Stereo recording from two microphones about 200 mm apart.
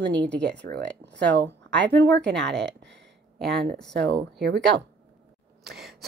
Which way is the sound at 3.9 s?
60° right (ahead or behind).